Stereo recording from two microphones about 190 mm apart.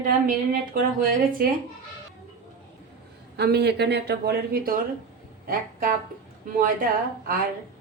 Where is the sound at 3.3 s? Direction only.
60° right (ahead or behind).